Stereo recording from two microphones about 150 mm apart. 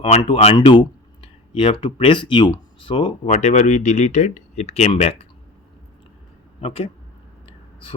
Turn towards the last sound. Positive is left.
turn(degrees=35)  # may be behind; listen again after turning